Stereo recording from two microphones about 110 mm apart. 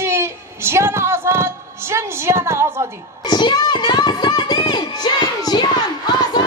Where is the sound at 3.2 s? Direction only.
40° left (ahead or behind).